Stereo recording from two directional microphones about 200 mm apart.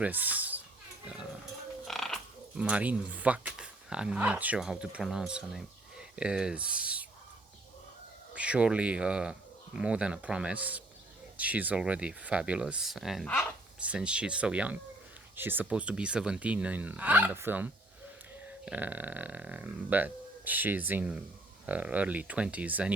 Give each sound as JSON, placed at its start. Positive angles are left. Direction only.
{"t": 0.0, "sound": "a child's voice", "side_deg": -10}
{"t": 1.8, "sound": "speech", "side_deg": 0}
{"t": 8.4, "sound": "speech", "side_deg": -5}